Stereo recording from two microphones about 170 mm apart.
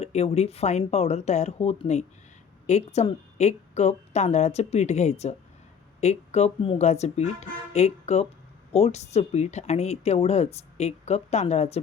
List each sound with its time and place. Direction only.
0.0 s speech: 40° left (ahead or behind)